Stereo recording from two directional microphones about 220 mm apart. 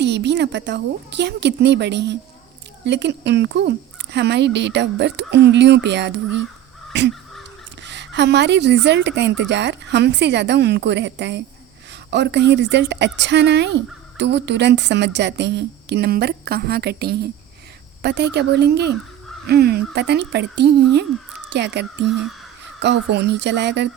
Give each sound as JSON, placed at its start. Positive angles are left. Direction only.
{"t": 0.0, "sound": "speech", "side_deg": -50}
{"t": 7.9, "sound": "speech", "side_deg": -50}